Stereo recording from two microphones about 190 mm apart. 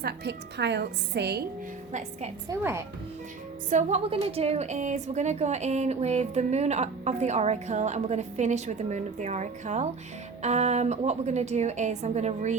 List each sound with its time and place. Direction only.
0.0 s a woman's voice: 65° right (ahead or behind)
1.9 s a woman's voice: 40° right (ahead or behind)
2.5 s speech: 15° right (ahead or behind)
3.7 s a woman's voice: 40° right (ahead or behind)